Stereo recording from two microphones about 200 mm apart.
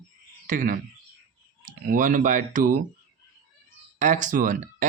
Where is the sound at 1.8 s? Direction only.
45° right (ahead or behind).